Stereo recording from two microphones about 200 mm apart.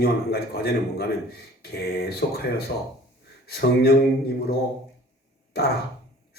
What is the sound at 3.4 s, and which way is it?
Speech, 50° left (ahead or behind).